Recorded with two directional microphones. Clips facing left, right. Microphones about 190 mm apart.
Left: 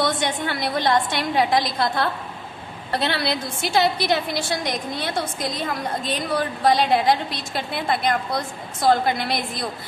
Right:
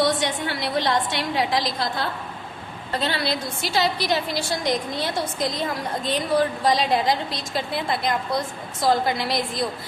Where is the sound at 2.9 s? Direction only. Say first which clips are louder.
Left 1 dB; 70° left (ahead or behind).